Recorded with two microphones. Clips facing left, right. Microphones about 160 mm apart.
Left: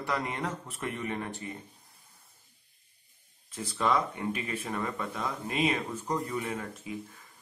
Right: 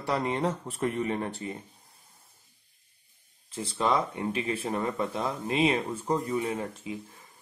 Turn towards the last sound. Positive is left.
turn(degrees=-25)  # may be behind; listen again after turning